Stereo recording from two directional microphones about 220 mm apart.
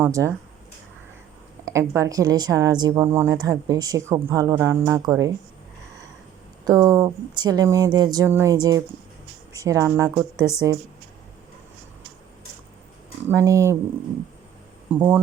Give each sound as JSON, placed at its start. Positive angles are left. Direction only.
{"t": 0.0, "sound": "speech", "side_deg": -10}
{"t": 1.6, "sound": "speech", "side_deg": -15}
{"t": 6.7, "sound": "speech", "side_deg": -15}
{"t": 13.2, "sound": "speech", "side_deg": -15}
{"t": 14.9, "sound": "speech", "side_deg": -10}